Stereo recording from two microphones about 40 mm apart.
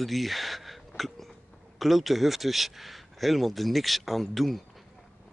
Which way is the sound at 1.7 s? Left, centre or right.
Centre.